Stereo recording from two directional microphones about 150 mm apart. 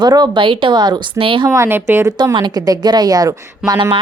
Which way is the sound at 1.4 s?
20° right (ahead or behind).